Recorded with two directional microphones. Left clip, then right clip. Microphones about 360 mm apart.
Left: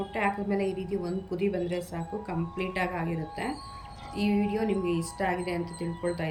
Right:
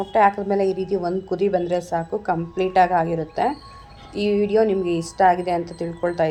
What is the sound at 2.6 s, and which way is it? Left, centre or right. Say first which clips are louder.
Speech: right 14 dB; centre.